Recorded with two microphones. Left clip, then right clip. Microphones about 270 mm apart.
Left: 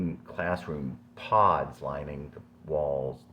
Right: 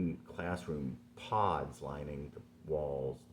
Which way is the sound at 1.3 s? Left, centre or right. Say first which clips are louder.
Left 10 dB; left.